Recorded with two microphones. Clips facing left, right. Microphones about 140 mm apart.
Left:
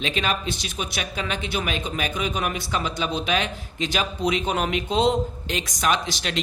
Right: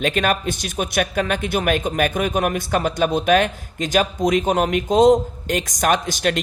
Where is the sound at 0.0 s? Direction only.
50° right (ahead or behind).